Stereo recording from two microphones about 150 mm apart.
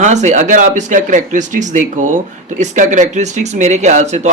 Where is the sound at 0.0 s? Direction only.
50° right (ahead or behind).